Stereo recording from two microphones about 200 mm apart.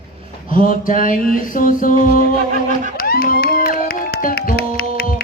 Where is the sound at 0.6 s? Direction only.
40° left (ahead or behind).